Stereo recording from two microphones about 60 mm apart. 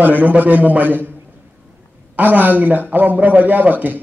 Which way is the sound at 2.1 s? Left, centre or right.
Right.